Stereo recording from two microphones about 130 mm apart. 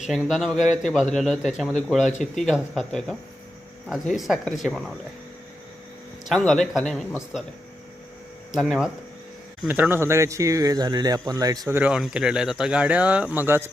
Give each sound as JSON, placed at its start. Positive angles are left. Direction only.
{"t": 0.1, "sound": "a man's voice", "side_deg": 0}
{"t": 6.2, "sound": "a man's voice", "side_deg": 5}
{"t": 8.5, "sound": "a man's voice", "side_deg": -5}
{"t": 11.7, "sound": "speech", "side_deg": -10}